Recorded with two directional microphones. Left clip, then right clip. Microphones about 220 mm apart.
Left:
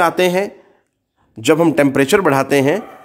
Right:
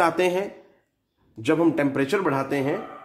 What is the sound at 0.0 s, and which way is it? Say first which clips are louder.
Speech: left 7 dB; 30° left (ahead or behind).